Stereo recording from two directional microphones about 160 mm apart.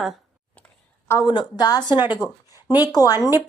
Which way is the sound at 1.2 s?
25° left (ahead or behind).